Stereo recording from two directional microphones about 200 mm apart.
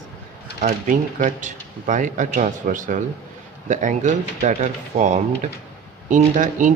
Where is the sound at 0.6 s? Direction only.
40° right (ahead or behind).